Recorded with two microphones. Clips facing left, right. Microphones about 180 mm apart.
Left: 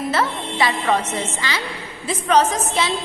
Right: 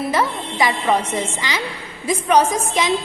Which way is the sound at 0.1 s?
15° right (ahead or behind).